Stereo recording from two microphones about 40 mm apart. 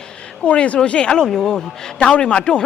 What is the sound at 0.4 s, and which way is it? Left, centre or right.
A man's voice, left.